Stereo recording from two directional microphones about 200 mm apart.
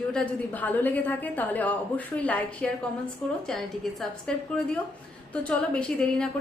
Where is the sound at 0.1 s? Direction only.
10° left (ahead or behind).